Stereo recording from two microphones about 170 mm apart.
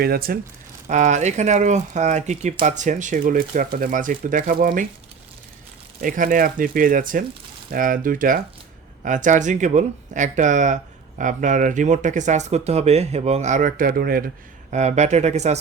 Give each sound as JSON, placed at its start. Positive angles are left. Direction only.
{"t": 0.0, "sound": "speech", "side_deg": -60}
{"t": 0.9, "sound": "speech", "side_deg": -45}
{"t": 6.0, "sound": "speech", "side_deg": -55}
{"t": 14.7, "sound": "speech", "side_deg": -40}